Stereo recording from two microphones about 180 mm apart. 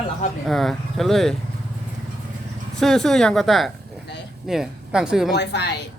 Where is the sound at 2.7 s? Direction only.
Centre (ahead or behind).